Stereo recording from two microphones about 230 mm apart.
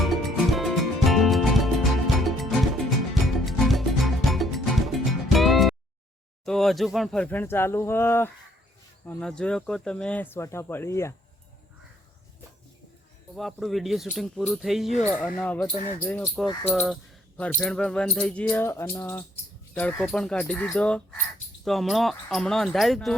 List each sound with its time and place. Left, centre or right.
0.0 s music: centre
6.4 s speech: centre
13.3 s speech: centre
15.7 s speech: left
16.0 s speech: centre
16.6 s a sound: centre
17.6 s speech: centre